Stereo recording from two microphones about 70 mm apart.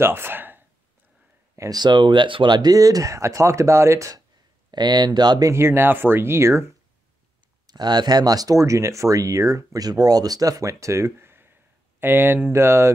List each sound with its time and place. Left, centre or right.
0.0 s speech: right
1.7 s speech: right
4.6 s speech: right
5.4 s speech: right
7.6 s speech: right
9.8 s speech: right